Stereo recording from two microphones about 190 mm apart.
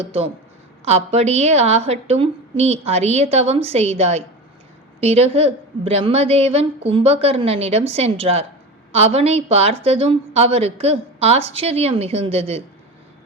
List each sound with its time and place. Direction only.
0.0 s a woman's voice: 30° right (ahead or behind)